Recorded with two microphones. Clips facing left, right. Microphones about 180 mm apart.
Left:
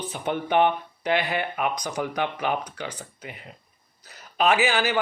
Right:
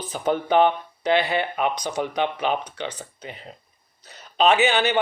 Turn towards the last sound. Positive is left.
turn(degrees=-25)  # may be behind; listen again after turning